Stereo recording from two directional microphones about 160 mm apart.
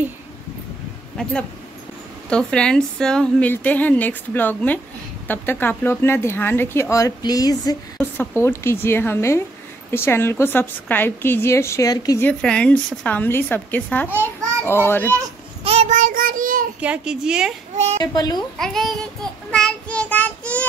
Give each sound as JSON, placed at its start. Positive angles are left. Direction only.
{"t": 2.2, "sound": "speech", "side_deg": 5}
{"t": 12.3, "sound": "speech", "side_deg": 5}
{"t": 15.6, "sound": "child singing", "side_deg": -40}
{"t": 16.8, "sound": "a woman's voice", "side_deg": -5}
{"t": 18.0, "sound": "a woman's voice", "side_deg": 25}
{"t": 18.6, "sound": "a woman's voice", "side_deg": 0}
{"t": 19.5, "sound": "child singing", "side_deg": 5}